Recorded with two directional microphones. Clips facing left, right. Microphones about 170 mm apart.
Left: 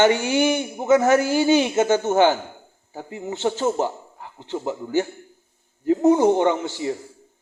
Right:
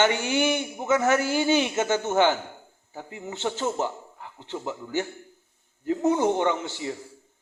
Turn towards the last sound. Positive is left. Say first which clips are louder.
# left 6 dB
turn(degrees=45)  # may be behind; listen again after turning